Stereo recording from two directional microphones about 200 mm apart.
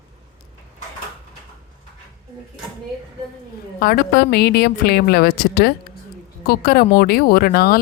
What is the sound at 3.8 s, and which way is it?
Speech, 50° left (ahead or behind).